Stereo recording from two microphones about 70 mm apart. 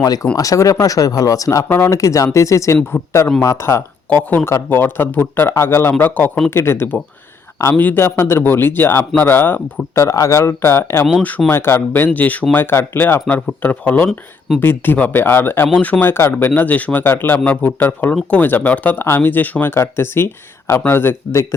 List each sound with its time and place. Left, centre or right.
0.0 s speech: left
0.3 s speech: left
1.6 s speech: left
2.0 s speech: left
2.9 s speech: left
4.1 s speech: left
6.5 s speech: left
7.9 s speech: left
11.2 s speech: left
11.5 s speech: left
14.1 s speech: centre
14.6 s speech: left
16.6 s speech: left
19.7 s speech: left